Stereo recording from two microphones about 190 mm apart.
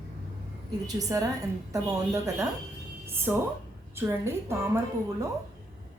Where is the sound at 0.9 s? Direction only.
20° right (ahead or behind).